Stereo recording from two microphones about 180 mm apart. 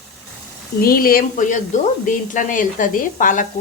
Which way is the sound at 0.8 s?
55° left (ahead or behind).